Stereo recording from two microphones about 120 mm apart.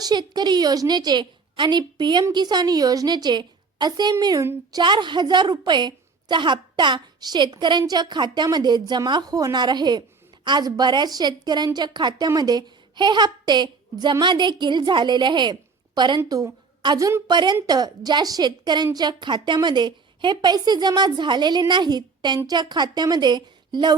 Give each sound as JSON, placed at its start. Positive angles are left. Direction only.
{"t": 0.0, "sound": "a woman's voice", "side_deg": -35}